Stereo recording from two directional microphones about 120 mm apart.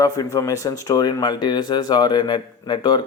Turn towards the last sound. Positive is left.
turn(degrees=40)  # may be behind; listen again after turning